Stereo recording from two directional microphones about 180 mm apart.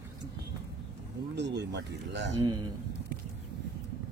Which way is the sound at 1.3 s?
70° right (ahead or behind).